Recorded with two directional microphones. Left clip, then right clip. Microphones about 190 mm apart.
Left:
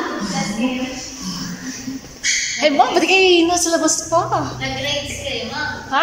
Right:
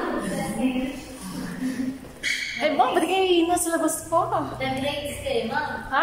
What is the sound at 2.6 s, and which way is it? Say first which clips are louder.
A woman's voice: left 6 dB; 5° left (ahead or behind).